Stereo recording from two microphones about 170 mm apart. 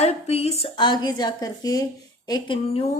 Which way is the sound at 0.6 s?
25° left (ahead or behind).